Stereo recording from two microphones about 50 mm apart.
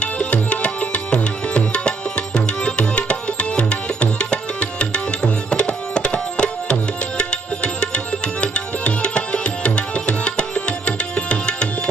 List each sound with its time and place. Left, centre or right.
0.0 s music: left
7.2 s tabla: left